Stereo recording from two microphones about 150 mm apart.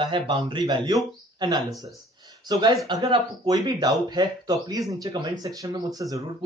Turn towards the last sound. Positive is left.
turn(degrees=-25)  # may be behind; listen again after turning